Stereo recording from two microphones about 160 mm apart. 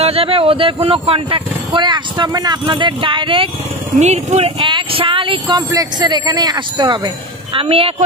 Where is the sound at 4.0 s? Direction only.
45° right (ahead or behind).